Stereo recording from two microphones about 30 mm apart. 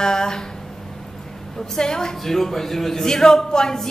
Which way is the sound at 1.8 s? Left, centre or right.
Left.